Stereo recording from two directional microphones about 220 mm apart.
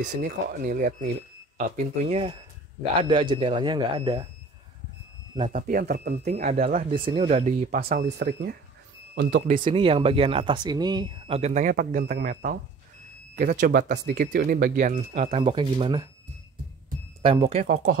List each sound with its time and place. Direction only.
0.0 s speech: 40° right (ahead or behind)
1.8 s speech: 30° right (ahead or behind)
5.5 s speech: 40° right (ahead or behind)
9.7 s speech: 25° right (ahead or behind)
17.2 s speech: 25° right (ahead or behind)